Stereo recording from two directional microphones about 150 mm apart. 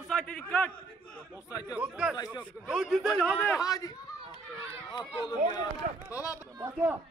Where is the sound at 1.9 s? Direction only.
5° right (ahead or behind).